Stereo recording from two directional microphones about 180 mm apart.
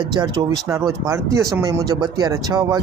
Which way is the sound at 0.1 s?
20° right (ahead or behind).